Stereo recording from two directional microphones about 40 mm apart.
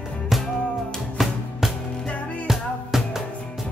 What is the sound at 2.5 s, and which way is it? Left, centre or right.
Music, centre.